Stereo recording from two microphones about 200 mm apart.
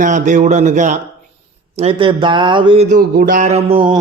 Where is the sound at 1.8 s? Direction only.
25° right (ahead or behind).